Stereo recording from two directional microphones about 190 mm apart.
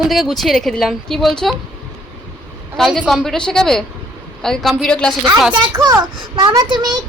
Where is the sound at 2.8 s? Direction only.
Centre (ahead or behind).